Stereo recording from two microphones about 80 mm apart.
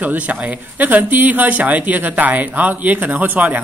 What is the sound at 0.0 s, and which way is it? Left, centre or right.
Speech, centre.